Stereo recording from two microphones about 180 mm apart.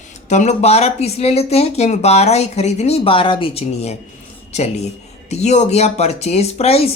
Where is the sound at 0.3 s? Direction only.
40° left (ahead or behind).